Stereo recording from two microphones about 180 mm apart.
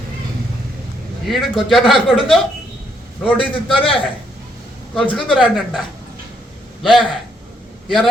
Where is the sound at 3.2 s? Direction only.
30° left (ahead or behind).